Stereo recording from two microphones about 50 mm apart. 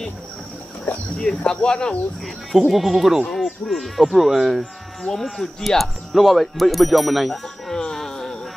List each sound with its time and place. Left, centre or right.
1.1 s speech: centre
2.7 s speech: centre
7.7 s music: centre